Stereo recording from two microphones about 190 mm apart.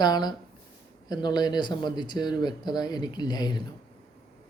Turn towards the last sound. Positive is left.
turn(degrees=20)  # may be behind; listen again after turning